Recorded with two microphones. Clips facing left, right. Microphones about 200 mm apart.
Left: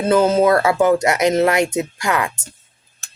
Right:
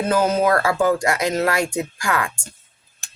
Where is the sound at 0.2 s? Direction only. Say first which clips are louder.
Left 3 dB; 25° left (ahead or behind).